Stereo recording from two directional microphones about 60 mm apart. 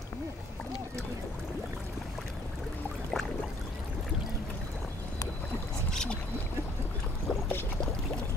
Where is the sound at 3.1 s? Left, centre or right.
Centre.